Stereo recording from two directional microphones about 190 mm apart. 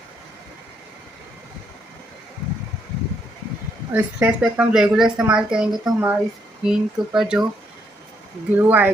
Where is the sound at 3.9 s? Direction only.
5° right (ahead or behind).